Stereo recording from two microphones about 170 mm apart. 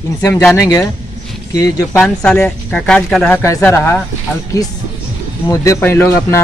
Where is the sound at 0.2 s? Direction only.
15° left (ahead or behind).